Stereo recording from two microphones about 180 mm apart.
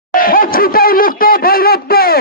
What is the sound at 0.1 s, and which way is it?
Speech, 50° left (ahead or behind).